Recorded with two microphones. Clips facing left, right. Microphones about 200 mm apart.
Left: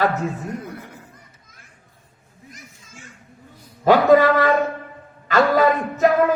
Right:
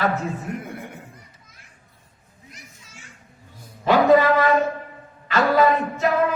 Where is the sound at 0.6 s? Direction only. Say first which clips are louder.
Right 1 dB; 25° right (ahead or behind).